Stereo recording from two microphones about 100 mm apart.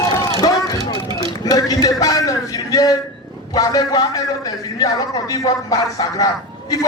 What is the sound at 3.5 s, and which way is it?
A man's voice, 35° left (ahead or behind).